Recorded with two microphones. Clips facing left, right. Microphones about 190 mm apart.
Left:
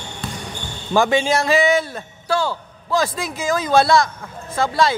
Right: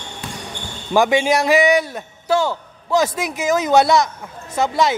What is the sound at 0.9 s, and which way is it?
A man's voice, 15° right (ahead or behind).